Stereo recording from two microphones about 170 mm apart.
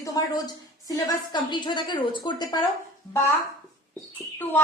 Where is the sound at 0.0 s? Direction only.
20° left (ahead or behind).